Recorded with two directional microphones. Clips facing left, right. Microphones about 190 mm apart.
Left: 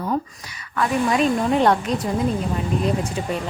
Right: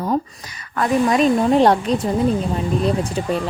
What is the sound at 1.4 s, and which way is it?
Speech, 35° right (ahead or behind).